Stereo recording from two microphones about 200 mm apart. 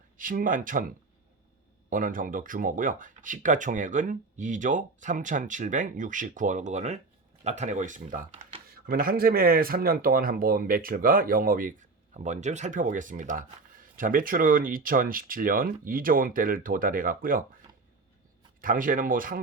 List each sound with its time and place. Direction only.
0.2 s speech: 45° right (ahead or behind)
1.9 s speech: 40° right (ahead or behind)
18.6 s speech: 40° right (ahead or behind)